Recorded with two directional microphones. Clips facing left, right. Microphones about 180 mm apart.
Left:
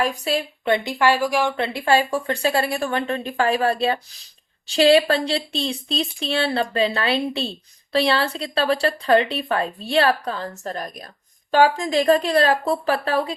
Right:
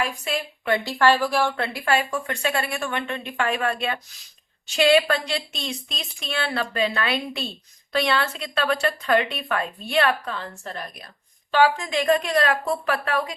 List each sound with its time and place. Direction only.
0.0 s speech: 35° left (ahead or behind)
0.6 s speech: 20° left (ahead or behind)